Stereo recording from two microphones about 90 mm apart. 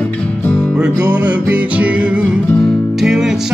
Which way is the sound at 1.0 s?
20° right (ahead or behind).